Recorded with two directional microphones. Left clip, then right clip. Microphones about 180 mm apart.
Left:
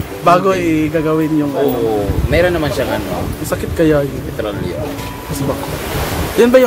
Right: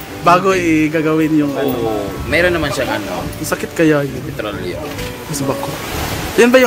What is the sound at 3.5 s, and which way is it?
Speech, 15° right (ahead or behind).